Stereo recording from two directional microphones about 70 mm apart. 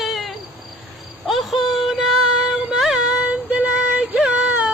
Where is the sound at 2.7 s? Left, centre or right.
Centre.